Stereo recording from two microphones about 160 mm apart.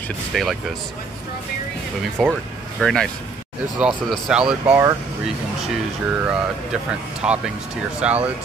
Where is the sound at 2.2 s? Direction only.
Centre (ahead or behind).